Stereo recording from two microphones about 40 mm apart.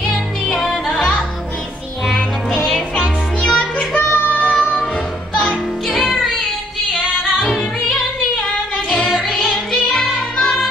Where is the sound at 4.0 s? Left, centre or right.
Left.